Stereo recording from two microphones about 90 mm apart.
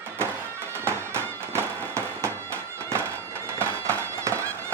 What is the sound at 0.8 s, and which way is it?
Music, 30° right (ahead or behind).